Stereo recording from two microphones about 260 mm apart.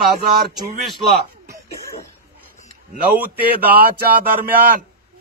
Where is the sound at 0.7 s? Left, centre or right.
Centre.